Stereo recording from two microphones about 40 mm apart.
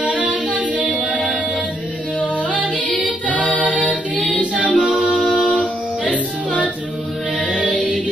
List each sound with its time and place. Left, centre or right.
0.0 s a capella: right
3.3 s choir: left
4.4 s music: left
4.7 s music: right
6.0 s music: left